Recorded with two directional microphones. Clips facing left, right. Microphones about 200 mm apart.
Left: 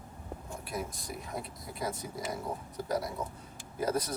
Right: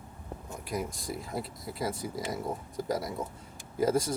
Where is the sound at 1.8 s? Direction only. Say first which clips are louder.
Right 3 dB; 25° right (ahead or behind).